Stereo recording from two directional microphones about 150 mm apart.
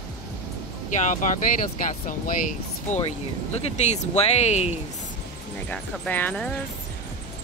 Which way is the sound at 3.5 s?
50° left (ahead or behind).